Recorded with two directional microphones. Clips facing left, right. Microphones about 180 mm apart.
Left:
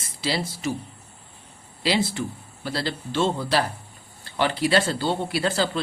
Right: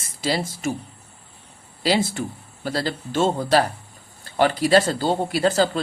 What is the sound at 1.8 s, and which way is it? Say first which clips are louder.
Speech: right 2 dB; 45° right (ahead or behind).